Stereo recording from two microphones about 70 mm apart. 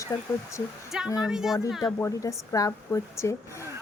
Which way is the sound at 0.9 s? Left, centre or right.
Centre.